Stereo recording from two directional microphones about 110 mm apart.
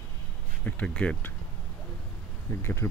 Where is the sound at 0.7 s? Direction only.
10° left (ahead or behind).